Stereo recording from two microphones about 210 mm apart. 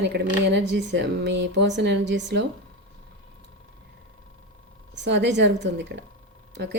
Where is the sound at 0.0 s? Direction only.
50° right (ahead or behind).